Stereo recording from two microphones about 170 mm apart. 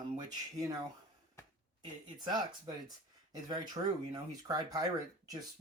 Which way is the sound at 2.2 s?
25° right (ahead or behind).